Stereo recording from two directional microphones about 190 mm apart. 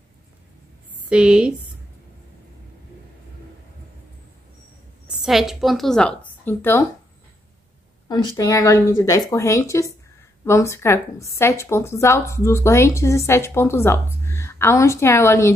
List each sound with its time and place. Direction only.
1.0 s a woman's voice: 5° right (ahead or behind)
5.2 s a woman's voice: centre (ahead or behind)
8.1 s speech: 20° left (ahead or behind)